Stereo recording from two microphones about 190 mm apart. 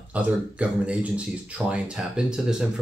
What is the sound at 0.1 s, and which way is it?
Speech, 5° right (ahead or behind).